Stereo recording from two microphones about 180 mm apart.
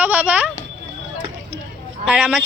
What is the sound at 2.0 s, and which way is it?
Speech, 5° right (ahead or behind).